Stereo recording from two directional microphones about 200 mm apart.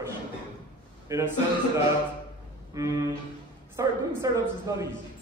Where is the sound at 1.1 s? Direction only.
15° right (ahead or behind).